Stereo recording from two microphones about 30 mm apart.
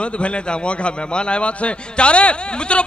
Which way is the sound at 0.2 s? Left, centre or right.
Left.